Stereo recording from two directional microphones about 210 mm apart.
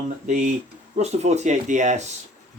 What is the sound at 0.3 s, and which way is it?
Speech, 40° right (ahead or behind).